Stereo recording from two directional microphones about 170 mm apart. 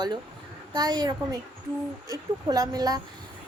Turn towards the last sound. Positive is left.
turn(degrees=-20)  # may be behind; listen again after turning